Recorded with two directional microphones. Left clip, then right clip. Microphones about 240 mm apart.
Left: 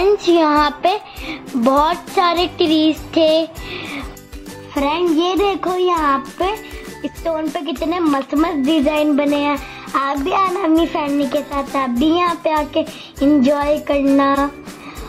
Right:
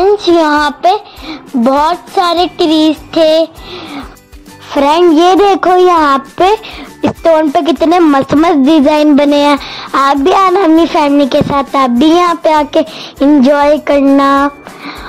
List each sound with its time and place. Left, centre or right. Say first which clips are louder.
0.0 s a woman's voice: right 6 dB; right
4.7 s a woman's voice: right 10 dB; right
7.5 s a woman's voice: right 12 dB; right